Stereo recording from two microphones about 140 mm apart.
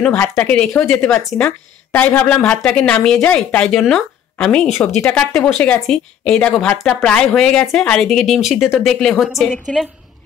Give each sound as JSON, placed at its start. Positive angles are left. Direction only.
{"t": 0.4, "sound": "a woman's voice", "side_deg": 10}